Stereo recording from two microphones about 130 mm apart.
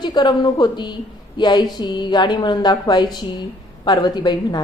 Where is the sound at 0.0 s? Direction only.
35° left (ahead or behind).